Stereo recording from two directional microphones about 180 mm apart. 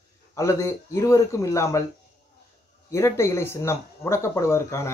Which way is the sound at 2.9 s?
15° left (ahead or behind).